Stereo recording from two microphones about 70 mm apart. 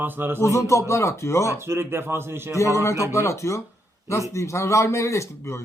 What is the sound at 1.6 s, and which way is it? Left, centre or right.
Speech, right.